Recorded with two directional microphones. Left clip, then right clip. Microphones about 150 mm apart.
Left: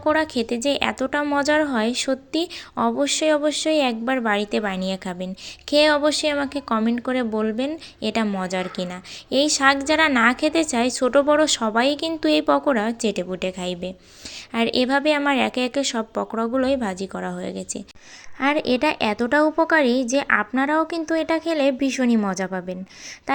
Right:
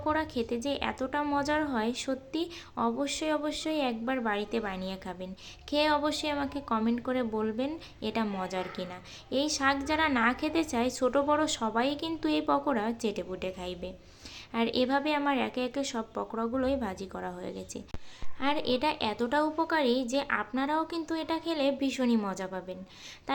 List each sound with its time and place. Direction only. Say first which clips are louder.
0.0 s a woman's voice: left 10 dB; 25° left (ahead or behind)
18.3 s a woman's voice: left 9 dB; 40° left (ahead or behind)